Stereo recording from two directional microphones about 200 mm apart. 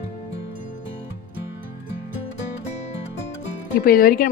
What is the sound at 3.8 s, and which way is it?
Speech, 45° left (ahead or behind).